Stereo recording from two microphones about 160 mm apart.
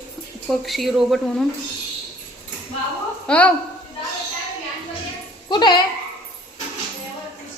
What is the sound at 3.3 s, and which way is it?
Speech, 5° left (ahead or behind).